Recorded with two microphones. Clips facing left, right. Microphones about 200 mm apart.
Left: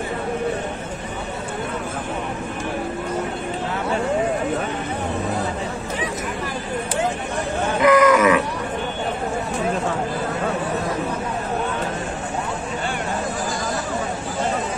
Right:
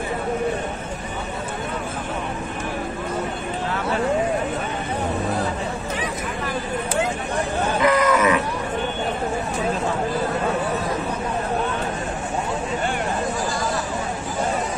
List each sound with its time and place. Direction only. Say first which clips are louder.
7.8 s livestock: left 5 dB; 55° left (ahead or behind)